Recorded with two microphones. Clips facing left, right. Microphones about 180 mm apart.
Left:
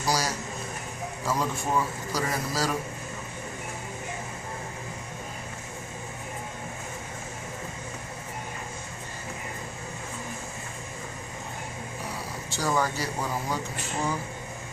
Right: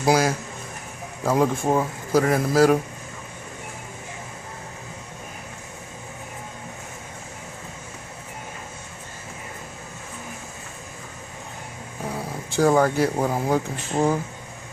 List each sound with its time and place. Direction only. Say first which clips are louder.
0.0 s a man's voice: right 8 dB; 55° right (ahead or behind)
12.1 s speech: right 9 dB; 55° right (ahead or behind)